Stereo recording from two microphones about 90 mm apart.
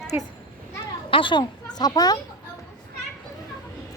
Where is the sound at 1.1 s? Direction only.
60° left (ahead or behind).